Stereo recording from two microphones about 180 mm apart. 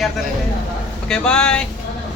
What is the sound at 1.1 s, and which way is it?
Speech, 5° left (ahead or behind).